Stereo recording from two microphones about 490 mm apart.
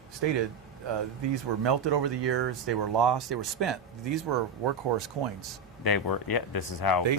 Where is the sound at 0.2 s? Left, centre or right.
Right.